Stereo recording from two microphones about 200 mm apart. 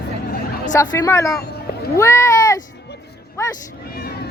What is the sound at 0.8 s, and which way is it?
Speech, 15° left (ahead or behind).